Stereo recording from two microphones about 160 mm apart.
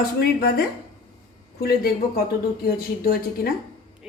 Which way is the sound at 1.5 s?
75° left (ahead or behind).